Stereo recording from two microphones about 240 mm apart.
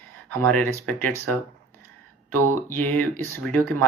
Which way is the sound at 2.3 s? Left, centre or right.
Right.